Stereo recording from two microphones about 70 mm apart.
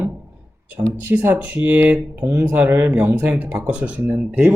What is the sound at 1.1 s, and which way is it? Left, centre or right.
Speech, right.